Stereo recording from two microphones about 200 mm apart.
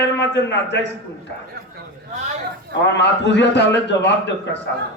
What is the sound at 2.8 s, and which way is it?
A man's voice, 60° left (ahead or behind).